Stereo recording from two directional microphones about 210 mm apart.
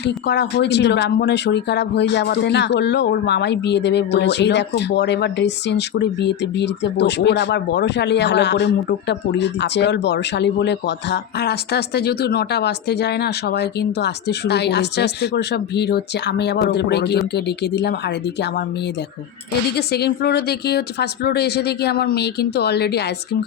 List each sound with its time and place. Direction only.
0.0 s speech: 55° left (ahead or behind)
19.7 s speech: 50° left (ahead or behind)